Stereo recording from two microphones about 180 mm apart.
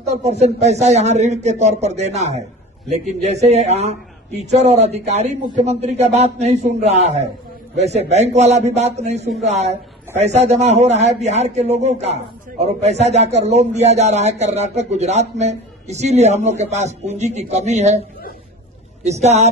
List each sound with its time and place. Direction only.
0.0 s a man's voice: 35° right (ahead or behind)
19.0 s a man's voice: 40° right (ahead or behind)